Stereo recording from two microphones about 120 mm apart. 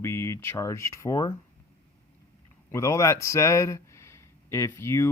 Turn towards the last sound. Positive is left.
turn(degrees=25)  # may be behind; listen again after turning